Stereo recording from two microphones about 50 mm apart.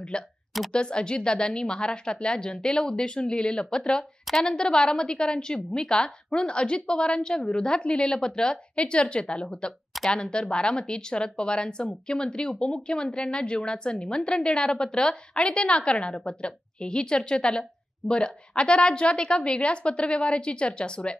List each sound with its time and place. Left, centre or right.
0.1 s a woman's voice: centre